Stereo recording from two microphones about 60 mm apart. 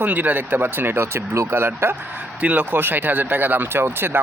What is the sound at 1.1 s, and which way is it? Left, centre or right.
Speech, right.